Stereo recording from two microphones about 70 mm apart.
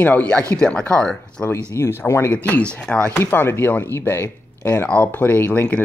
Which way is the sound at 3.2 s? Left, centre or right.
Left.